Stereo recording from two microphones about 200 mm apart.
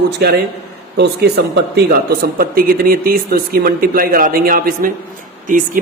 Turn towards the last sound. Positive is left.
turn(degrees=-40)  # may be behind; listen again after turning